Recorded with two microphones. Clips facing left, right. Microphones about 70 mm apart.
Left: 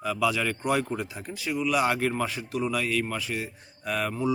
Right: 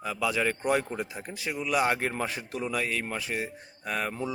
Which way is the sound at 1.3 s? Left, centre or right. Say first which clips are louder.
Left 3 dB; right.